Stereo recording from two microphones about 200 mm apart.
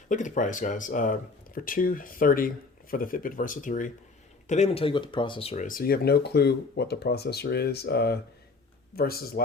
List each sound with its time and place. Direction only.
0.1 s speech: 40° left (ahead or behind)
5.6 s speech: 45° left (ahead or behind)